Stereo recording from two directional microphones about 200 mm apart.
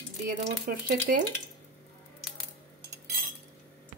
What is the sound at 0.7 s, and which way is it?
Speech, 45° right (ahead or behind).